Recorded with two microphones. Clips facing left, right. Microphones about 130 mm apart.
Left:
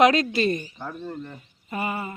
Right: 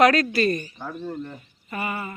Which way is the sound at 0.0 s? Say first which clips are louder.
Right 1 dB; 20° left (ahead or behind).